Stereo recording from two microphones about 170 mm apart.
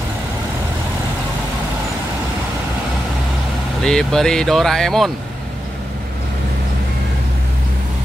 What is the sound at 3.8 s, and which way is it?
Speech, 5° left (ahead or behind).